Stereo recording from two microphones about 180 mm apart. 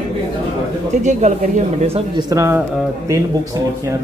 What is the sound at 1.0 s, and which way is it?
Speech, 40° right (ahead or behind).